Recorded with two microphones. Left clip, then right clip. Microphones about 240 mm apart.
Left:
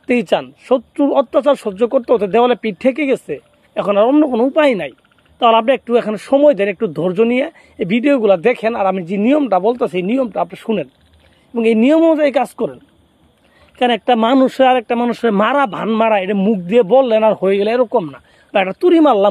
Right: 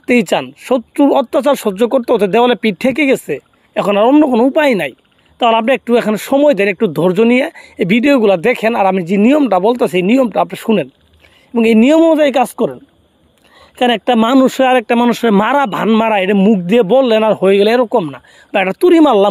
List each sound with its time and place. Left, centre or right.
0.0 s speech: right
13.7 s speech: right